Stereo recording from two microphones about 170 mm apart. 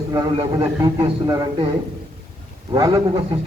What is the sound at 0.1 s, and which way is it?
A man's voice, 25° right (ahead or behind).